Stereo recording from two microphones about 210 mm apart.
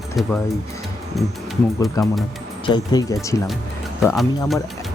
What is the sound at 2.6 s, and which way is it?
Speech, 20° left (ahead or behind).